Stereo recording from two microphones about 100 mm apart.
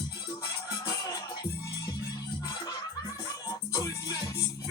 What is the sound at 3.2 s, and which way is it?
Music, 35° left (ahead or behind).